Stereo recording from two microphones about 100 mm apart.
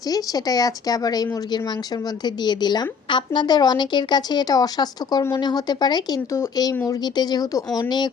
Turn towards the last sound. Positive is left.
turn(degrees=40)  # may be behind; listen again after turning